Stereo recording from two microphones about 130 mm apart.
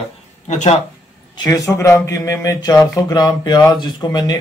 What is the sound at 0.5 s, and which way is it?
Speech, 70° left (ahead or behind).